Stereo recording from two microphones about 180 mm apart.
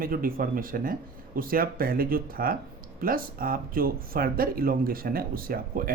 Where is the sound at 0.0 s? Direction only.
50° right (ahead or behind).